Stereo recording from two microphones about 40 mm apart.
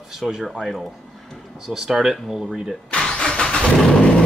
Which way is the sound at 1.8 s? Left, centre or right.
Centre.